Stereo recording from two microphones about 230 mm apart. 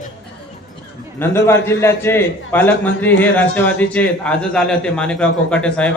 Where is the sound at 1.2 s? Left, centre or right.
Centre.